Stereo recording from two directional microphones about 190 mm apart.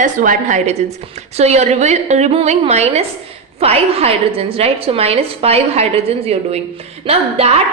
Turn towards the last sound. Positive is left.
turn(degrees=-30)  # may be behind; listen again after turning